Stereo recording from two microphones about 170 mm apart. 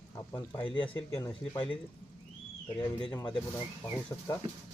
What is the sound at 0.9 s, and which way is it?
Speech, 15° left (ahead or behind).